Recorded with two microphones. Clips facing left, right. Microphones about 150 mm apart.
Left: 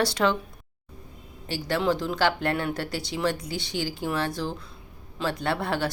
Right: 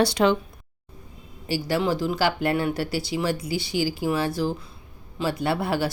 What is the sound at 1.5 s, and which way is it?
Speech, 5° right (ahead or behind).